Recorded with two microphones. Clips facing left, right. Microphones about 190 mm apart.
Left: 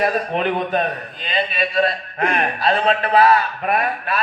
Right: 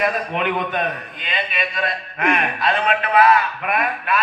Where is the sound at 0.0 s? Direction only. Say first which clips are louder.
Left 2 dB; 35° left (ahead or behind).